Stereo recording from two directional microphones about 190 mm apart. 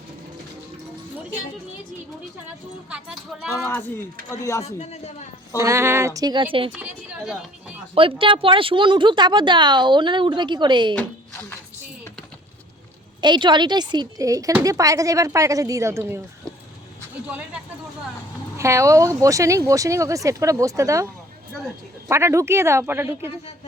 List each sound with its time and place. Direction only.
2.9 s speech: 5° right (ahead or behind)
3.5 s a man's voice: 15° left (ahead or behind)
4.6 s a man's voice: 35° left (ahead or behind)
5.5 s speech: 15° right (ahead or behind)
6.7 s a woman's voice: 5° right (ahead or behind)
8.2 s a woman's voice: 25° right (ahead or behind)
13.2 s speech: 25° right (ahead or behind)
18.5 s speech: 15° right (ahead or behind)
22.1 s speech: 15° right (ahead or behind)